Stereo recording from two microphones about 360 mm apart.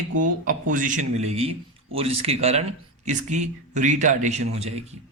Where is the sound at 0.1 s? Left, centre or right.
Right.